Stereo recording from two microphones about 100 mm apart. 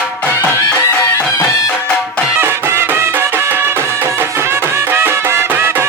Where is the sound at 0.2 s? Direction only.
25° left (ahead or behind).